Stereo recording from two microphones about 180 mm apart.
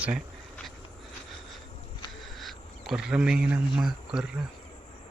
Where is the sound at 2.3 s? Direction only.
Centre (ahead or behind).